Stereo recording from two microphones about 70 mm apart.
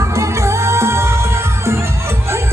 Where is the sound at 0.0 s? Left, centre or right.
Right.